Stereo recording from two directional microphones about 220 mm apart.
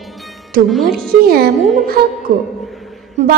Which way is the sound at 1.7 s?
40° right (ahead or behind).